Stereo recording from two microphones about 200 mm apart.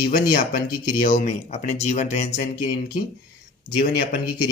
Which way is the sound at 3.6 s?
45° left (ahead or behind).